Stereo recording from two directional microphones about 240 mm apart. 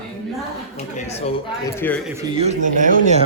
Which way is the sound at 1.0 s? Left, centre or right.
Left.